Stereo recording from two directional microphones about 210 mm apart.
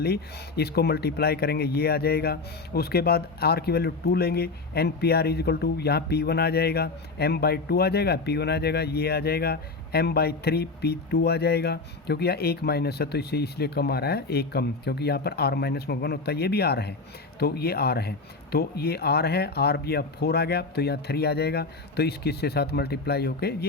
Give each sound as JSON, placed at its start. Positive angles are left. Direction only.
{"t": 0.0, "sound": "speech", "side_deg": 50}